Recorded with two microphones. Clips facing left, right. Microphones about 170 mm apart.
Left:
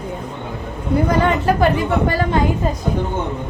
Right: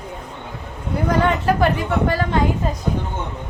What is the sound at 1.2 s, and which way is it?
A woman's voice, centre (ahead or behind).